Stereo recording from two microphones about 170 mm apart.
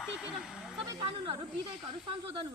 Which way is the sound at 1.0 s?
35° right (ahead or behind).